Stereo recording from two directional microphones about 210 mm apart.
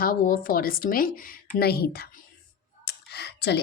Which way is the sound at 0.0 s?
40° left (ahead or behind).